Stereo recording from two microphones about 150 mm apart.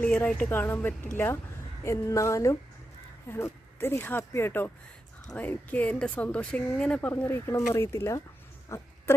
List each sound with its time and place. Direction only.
0.0 s a woman's voice: 10° left (ahead or behind)
9.1 s patter: 15° left (ahead or behind)